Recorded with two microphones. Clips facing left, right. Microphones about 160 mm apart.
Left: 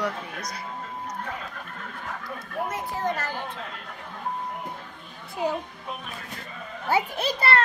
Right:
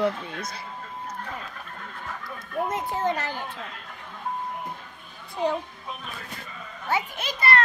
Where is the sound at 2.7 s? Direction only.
20° right (ahead or behind).